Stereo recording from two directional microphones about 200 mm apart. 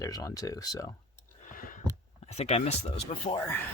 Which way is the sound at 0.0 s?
15° left (ahead or behind).